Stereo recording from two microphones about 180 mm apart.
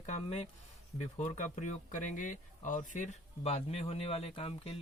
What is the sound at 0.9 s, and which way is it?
Speech, 40° left (ahead or behind).